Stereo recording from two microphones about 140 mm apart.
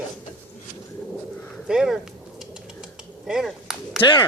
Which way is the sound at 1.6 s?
5° right (ahead or behind).